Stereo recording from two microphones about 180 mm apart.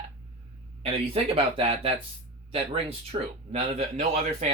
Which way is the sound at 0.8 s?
30° right (ahead or behind).